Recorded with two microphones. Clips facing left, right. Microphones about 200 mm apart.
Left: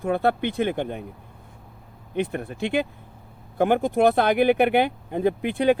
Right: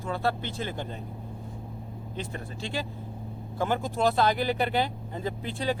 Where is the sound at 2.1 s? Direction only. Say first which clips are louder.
Left 11 dB; 60° left (ahead or behind).